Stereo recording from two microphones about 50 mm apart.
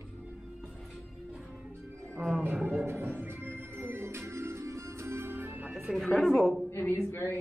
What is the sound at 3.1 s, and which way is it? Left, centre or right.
Music, right.